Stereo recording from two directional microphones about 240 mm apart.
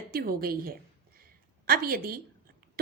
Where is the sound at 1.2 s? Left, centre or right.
Right.